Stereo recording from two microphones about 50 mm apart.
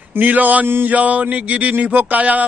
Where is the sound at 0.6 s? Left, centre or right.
Right.